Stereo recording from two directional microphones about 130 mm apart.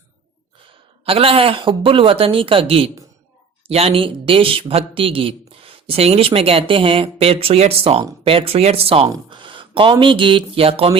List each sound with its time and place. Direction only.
1.0 s speech: 45° right (ahead or behind)